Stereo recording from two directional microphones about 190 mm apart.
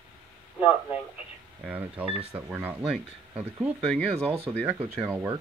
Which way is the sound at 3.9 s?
5° left (ahead or behind).